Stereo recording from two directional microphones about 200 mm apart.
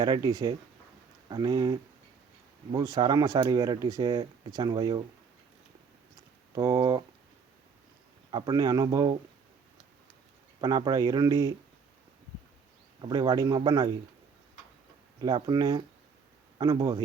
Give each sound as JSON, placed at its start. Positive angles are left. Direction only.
{"t": 0.0, "sound": "speech", "side_deg": -20}
{"t": 6.6, "sound": "speech", "side_deg": -20}
{"t": 8.3, "sound": "speech", "side_deg": -20}
{"t": 10.6, "sound": "speech", "side_deg": -20}
{"t": 13.0, "sound": "speech", "side_deg": -20}
{"t": 15.2, "sound": "speech", "side_deg": -20}